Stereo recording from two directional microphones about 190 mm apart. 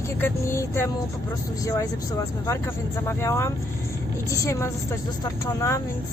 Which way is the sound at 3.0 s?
15° left (ahead or behind).